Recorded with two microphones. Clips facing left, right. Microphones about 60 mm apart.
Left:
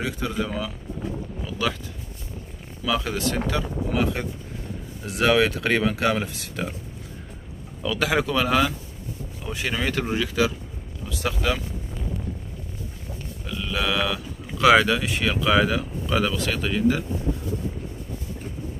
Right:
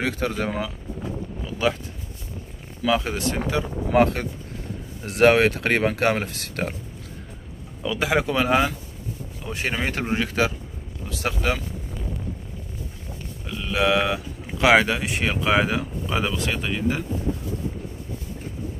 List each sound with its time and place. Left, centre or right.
0.0 s speech: right
2.9 s speech: right
3.9 s speech: right
7.8 s speech: centre
13.7 s speech: right
15.8 s speech: centre
16.3 s speech: right
16.6 s speech: right